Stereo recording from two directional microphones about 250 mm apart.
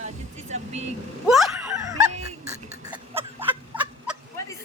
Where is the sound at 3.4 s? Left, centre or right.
Centre.